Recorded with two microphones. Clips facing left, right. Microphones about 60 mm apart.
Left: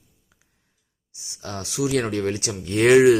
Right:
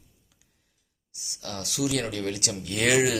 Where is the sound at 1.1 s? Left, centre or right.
Left.